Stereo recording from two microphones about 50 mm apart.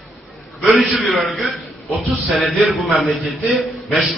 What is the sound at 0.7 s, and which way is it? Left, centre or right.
Speech, centre.